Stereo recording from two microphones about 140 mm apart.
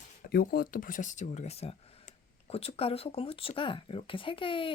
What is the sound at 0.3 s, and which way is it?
A woman's voice, 90° left.